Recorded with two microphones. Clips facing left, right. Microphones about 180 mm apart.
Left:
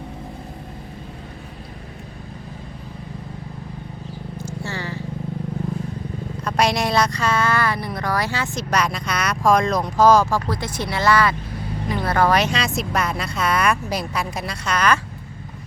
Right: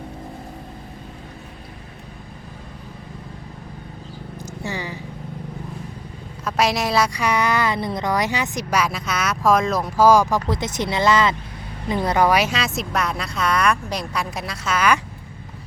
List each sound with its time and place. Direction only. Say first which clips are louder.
4.6 s purr: right 2 dB; 15° right (ahead or behind)
6.4 s speech: even; centre (ahead or behind)